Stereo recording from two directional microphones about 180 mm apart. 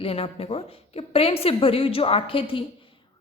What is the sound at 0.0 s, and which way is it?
A woman's voice, 35° left (ahead or behind).